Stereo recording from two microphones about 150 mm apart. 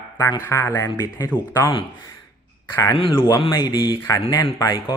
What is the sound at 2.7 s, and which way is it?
Speech, 20° left (ahead or behind).